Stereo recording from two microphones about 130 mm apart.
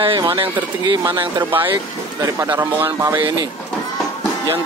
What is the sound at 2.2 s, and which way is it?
Speech, 25° right (ahead or behind).